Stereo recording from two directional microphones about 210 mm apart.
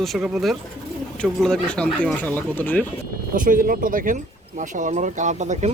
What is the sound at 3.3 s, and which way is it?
Speech, 40° right (ahead or behind).